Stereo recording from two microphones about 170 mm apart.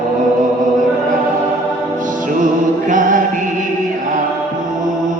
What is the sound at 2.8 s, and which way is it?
Music, 50° right (ahead or behind).